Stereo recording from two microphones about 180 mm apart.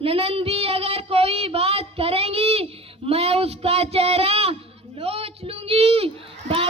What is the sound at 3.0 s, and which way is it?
Speech, 35° right (ahead or behind).